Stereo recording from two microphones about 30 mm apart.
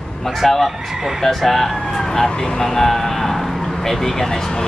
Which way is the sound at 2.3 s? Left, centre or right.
Left.